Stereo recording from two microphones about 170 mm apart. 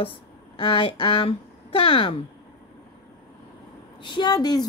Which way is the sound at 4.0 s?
25° left (ahead or behind).